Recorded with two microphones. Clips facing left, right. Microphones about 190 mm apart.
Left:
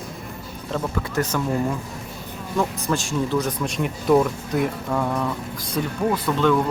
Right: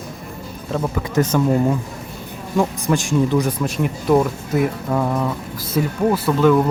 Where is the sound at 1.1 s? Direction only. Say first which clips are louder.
Right 7 dB; 20° right (ahead or behind).